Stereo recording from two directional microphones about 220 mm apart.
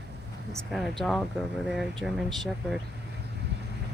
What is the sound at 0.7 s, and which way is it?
Speech, centre (ahead or behind).